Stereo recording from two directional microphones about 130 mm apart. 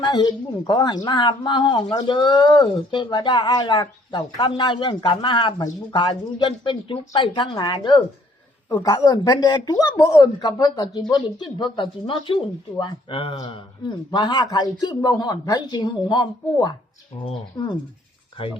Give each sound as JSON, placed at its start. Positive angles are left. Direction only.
{"t": 0.0, "sound": "speech", "side_deg": 35}
{"t": 13.3, "sound": "speech", "side_deg": 30}